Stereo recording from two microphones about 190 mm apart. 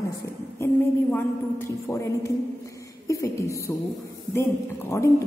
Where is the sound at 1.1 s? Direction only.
15° left (ahead or behind).